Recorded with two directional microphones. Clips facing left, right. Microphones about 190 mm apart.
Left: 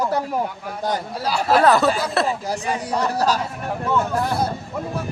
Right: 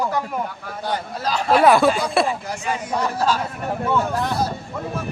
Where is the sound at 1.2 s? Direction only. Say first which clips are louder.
Even; 10° left (ahead or behind).